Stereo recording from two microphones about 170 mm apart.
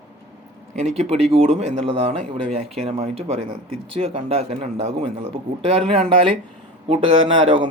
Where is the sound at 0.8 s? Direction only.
35° right (ahead or behind).